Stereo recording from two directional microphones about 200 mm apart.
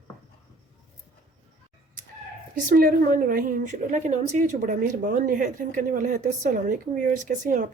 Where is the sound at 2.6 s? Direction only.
45° right (ahead or behind).